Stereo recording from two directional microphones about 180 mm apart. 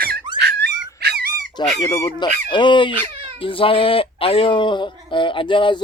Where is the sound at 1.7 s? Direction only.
20° left (ahead or behind).